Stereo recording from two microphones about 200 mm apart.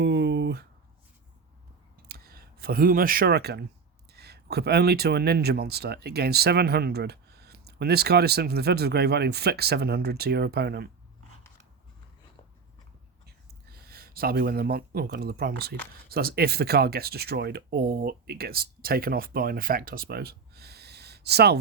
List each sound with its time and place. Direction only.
0.0 s a sound: 60° right (ahead or behind)
2.0 s speech: 50° right (ahead or behind)
13.2 s speech: 50° right (ahead or behind)